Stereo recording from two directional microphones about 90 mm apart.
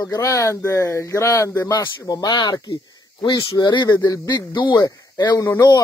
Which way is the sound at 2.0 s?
50° left (ahead or behind).